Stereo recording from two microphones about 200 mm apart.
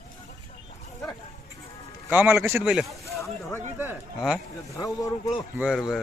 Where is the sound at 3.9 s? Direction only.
5° right (ahead or behind).